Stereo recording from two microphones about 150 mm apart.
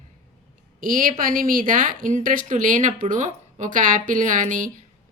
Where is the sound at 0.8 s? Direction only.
70° right (ahead or behind).